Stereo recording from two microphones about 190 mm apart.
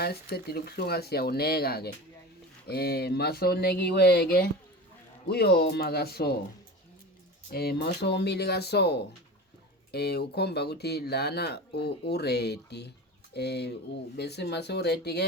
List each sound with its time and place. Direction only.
0.0 s speech: 55° left (ahead or behind)
7.5 s speech: 55° left (ahead or behind)